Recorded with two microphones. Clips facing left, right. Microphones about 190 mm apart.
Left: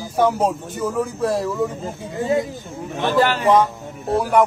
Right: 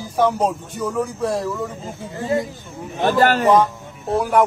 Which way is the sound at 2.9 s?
45° right (ahead or behind).